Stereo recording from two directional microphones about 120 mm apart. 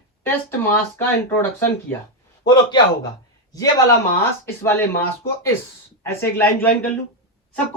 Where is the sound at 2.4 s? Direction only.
40° left (ahead or behind).